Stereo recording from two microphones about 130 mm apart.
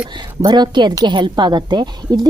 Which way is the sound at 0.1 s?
35° right (ahead or behind).